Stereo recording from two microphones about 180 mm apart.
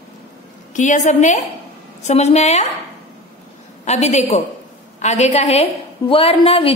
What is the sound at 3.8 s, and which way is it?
Speech, 40° left (ahead or behind).